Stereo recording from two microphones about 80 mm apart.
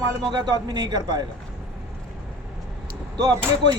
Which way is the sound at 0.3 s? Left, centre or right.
Right.